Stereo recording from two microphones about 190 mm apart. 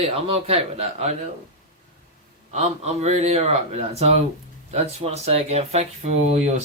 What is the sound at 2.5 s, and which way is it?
Speech, 35° right (ahead or behind).